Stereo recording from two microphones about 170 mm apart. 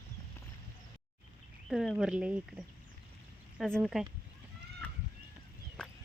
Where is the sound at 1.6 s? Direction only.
Centre (ahead or behind).